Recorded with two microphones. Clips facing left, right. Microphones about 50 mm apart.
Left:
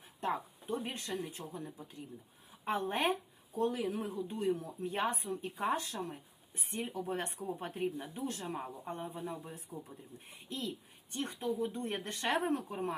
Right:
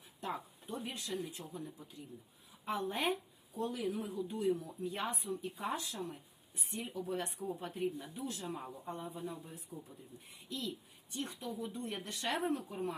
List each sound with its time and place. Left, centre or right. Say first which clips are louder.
0.2 s speech: left 5 dB; left
2.6 s speech: left 3 dB; left